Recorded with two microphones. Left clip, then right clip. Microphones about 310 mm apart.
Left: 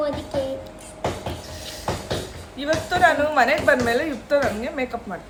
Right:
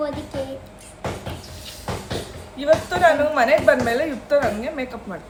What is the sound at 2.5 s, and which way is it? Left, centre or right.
A woman's voice, centre.